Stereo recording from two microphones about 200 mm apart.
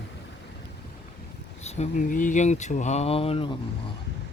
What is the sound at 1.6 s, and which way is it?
Speech, 35° left (ahead or behind).